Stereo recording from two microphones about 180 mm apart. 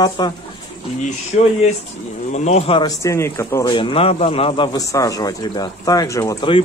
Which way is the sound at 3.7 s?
30° left (ahead or behind).